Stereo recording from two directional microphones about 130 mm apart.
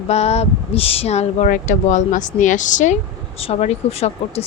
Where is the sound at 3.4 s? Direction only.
50° left (ahead or behind).